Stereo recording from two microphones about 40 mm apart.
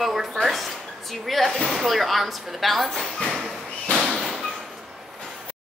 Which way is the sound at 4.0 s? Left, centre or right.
Centre.